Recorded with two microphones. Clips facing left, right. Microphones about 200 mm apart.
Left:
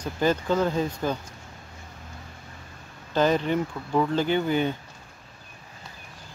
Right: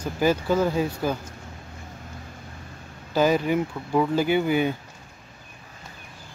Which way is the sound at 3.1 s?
10° right (ahead or behind).